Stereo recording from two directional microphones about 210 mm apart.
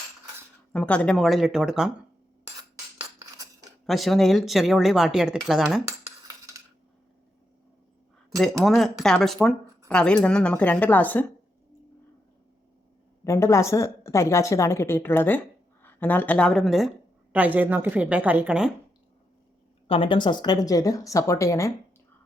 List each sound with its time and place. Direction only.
0.7 s speech: 5° left (ahead or behind)
3.8 s speech: centre (ahead or behind)
6.2 s a sound: 15° right (ahead or behind)
8.6 s speech: centre (ahead or behind)
13.2 s a woman's voice: 15° left (ahead or behind); by 18.7 s 5° right (ahead or behind)
19.9 s speech: 25° left (ahead or behind)